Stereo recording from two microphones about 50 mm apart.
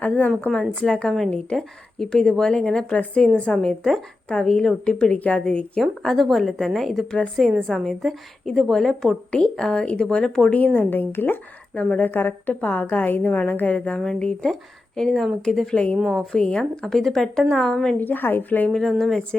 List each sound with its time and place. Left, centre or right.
0.4 s a woman's voice: centre
1.5 s a woman's voice: centre
2.4 s a woman's voice: left
5.8 s a woman's voice: centre
7.4 s a woman's voice: centre
7.7 s a woman's voice: centre
10.8 s speech: left
11.8 s a woman's voice: left; by 15.7 s centre
15.7 s a woman's voice: left
16.8 s speech: centre
18.0 s a woman's voice: left
18.7 s speech: centre